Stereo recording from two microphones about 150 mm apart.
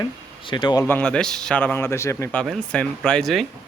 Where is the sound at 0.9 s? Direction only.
10° left (ahead or behind).